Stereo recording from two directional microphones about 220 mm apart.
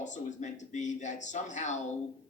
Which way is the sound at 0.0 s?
35° left (ahead or behind).